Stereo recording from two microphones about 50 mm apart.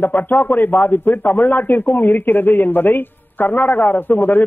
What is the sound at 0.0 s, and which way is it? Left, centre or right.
Speech, left.